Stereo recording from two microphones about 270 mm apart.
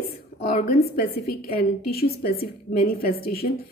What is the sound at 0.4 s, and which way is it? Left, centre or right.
Speech, left.